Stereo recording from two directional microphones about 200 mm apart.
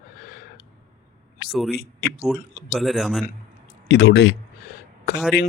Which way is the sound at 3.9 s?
55° left (ahead or behind).